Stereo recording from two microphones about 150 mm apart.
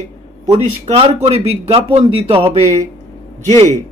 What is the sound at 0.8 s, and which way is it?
Speech, 40° right (ahead or behind).